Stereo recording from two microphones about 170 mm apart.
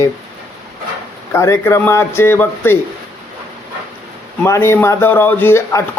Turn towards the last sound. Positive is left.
turn(degrees=15)  # may be behind; listen again after turning